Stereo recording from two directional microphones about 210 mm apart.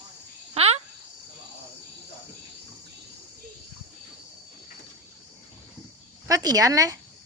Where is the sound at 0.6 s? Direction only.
30° right (ahead or behind).